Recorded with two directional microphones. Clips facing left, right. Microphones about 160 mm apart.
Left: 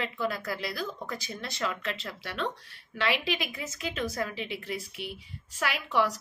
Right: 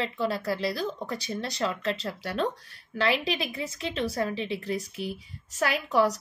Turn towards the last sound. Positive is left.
turn(degrees=-40)  # may be behind; listen again after turning